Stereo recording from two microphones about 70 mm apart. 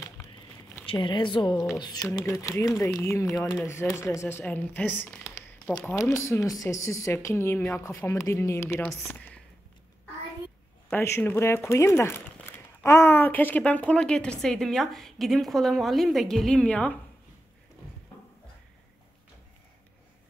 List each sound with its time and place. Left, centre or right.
0.9 s speech: left
1.8 s speech: left
2.2 s speech: left
4.5 s speech: left
5.9 s speech: left
11.0 s a woman's voice: left; by 16.6 s centre
16.6 s speech: centre